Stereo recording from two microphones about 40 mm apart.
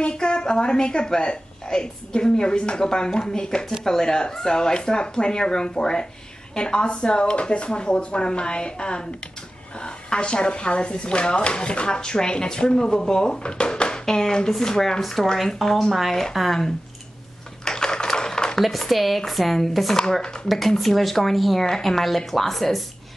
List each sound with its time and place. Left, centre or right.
0.0 s speech: left
16.3 s speech: centre
17.6 s typewriter: centre
18.6 s speech: centre
20.0 s speech: centre
20.4 s speech: centre